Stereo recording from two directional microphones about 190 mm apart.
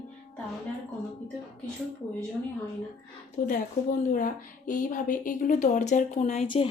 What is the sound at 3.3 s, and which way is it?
A woman's voice, 45° left (ahead or behind).